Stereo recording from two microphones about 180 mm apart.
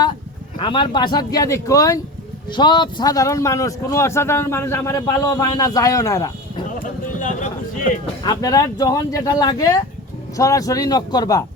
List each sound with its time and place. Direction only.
0.6 s a man's voice: 25° left (ahead or behind)
6.7 s a sound: 45° left (ahead or behind)
8.0 s speech: 25° left (ahead or behind)